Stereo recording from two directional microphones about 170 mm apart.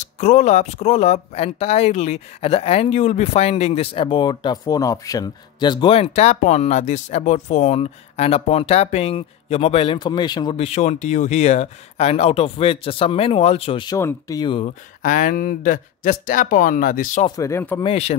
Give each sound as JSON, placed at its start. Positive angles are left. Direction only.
{"t": 0.2, "sound": "speech", "side_deg": 45}
{"t": 13.9, "sound": "speech", "side_deg": 20}
{"t": 15.0, "sound": "speech", "side_deg": 50}
{"t": 17.4, "sound": "speech", "side_deg": 15}
{"t": 17.8, "sound": "speech", "side_deg": 40}